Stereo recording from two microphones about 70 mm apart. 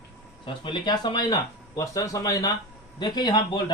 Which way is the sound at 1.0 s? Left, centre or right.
Left.